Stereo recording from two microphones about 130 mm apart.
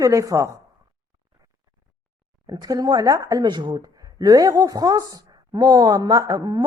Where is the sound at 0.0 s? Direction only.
25° right (ahead or behind).